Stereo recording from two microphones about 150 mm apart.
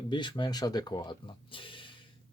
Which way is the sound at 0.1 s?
30° left (ahead or behind).